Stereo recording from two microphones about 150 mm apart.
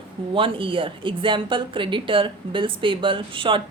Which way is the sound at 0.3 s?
35° right (ahead or behind).